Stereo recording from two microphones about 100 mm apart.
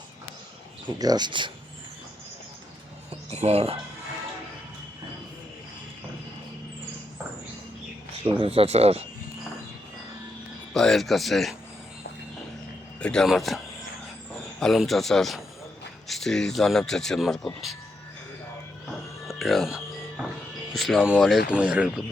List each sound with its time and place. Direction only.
0.9 s speech: 40° right (ahead or behind)
3.2 s speech: 90° right
8.2 s speech: 70° right (ahead or behind); by 9.0 s 90° right
10.8 s speech: 5° left (ahead or behind)
13.0 s speech: 10° left (ahead or behind)
14.6 s speech: centre (ahead or behind)
19.3 s music: centre (ahead or behind)
20.7 s speech: centre (ahead or behind)